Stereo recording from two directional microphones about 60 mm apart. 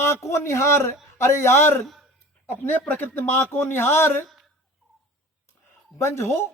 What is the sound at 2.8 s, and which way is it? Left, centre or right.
A man's voice, left.